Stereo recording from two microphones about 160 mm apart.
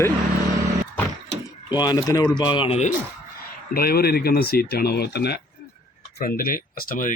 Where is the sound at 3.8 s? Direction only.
70° left (ahead or behind); by 5.4 s 90° left.